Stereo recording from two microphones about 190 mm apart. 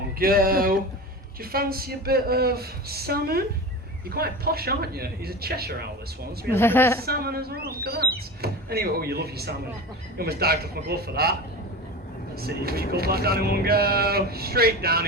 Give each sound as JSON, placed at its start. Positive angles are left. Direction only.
{"t": 0.2, "sound": "a woman's voice", "side_deg": -50}
{"t": 6.5, "sound": "a woman's voice", "side_deg": 10}
{"t": 7.0, "sound": "speech", "side_deg": -55}
{"t": 12.4, "sound": "a woman's voice", "side_deg": -55}